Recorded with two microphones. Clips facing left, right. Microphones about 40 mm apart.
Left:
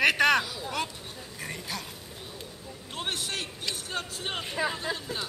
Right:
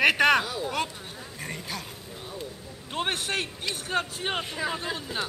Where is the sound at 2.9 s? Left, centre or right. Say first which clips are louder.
Right 5 dB; right.